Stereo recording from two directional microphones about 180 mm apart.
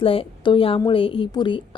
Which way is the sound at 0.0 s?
30° left (ahead or behind).